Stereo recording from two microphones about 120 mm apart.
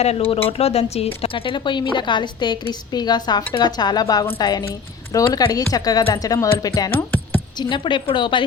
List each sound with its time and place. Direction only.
0.0 s speech: 55° left (ahead or behind); by 6.9 s 30° left (ahead or behind)
6.9 s a sound: 15° left (ahead or behind)
7.6 s speech: 40° left (ahead or behind)